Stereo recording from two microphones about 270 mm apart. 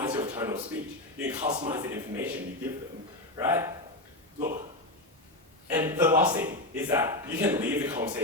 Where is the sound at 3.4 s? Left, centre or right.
Centre.